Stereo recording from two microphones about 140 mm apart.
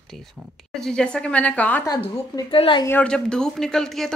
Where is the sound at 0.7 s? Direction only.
5° left (ahead or behind).